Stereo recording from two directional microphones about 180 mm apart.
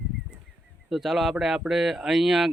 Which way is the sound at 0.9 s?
Centre (ahead or behind).